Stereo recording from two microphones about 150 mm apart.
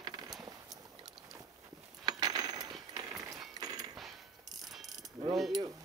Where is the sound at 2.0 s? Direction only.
25° right (ahead or behind).